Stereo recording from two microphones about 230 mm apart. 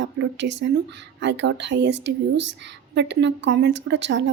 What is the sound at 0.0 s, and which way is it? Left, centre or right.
A woman's voice, right.